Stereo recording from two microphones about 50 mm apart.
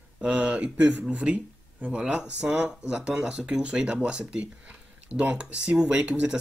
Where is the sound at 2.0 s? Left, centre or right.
Centre.